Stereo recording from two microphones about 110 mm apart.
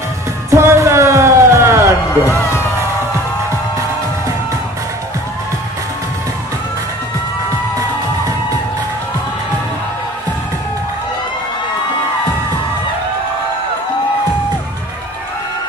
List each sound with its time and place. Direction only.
0.5 s music: 25° right (ahead or behind)
2.3 s speech: 25° left (ahead or behind)